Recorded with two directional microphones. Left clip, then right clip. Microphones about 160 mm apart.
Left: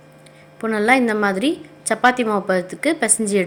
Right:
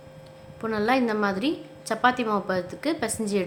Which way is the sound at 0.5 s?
25° left (ahead or behind).